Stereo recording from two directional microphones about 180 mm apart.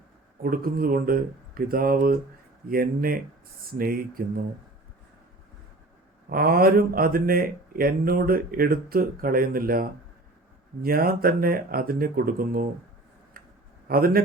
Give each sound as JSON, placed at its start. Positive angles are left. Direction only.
{"t": 0.4, "sound": "speech", "side_deg": -55}
{"t": 6.3, "sound": "speech", "side_deg": -55}
{"t": 13.8, "sound": "speech", "side_deg": -55}